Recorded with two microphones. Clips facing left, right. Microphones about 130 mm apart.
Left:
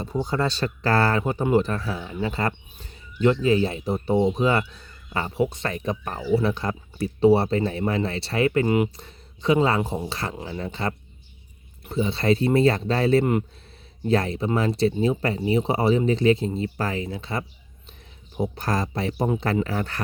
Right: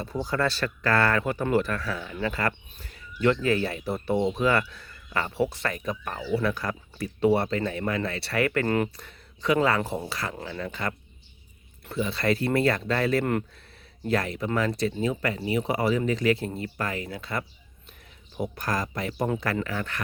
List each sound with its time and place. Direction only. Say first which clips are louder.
0.0 s speech: left 2 dB; 25° left (ahead or behind)
9.0 s speech: left 1 dB; 25° left (ahead or behind)